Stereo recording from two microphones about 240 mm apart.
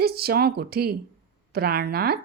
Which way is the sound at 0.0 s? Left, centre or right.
Right.